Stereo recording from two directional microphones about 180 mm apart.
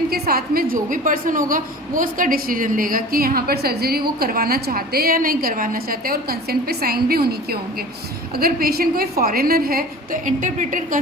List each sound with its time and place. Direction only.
0.1 s a woman's voice: 55° right (ahead or behind)
8.4 s a woman's voice: 55° right (ahead or behind)